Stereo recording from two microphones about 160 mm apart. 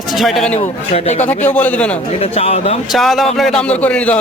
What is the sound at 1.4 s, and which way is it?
Speech, 10° left (ahead or behind).